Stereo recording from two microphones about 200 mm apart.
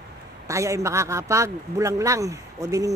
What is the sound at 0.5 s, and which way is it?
A man's voice, 15° right (ahead or behind).